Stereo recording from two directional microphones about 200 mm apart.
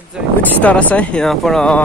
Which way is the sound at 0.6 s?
5° left (ahead or behind).